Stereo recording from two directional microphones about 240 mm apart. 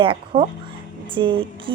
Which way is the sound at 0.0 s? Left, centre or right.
Right.